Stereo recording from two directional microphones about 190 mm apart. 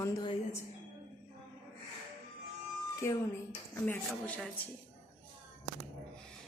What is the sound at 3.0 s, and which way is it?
Speech, 15° left (ahead or behind).